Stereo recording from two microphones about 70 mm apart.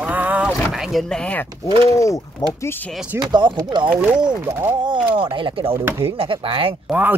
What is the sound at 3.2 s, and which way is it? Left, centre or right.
Speech, right.